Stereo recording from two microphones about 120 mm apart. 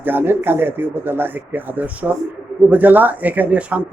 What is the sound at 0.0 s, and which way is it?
Speech, 15° right (ahead or behind).